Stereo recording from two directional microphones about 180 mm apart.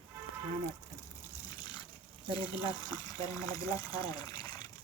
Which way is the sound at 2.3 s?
25° left (ahead or behind).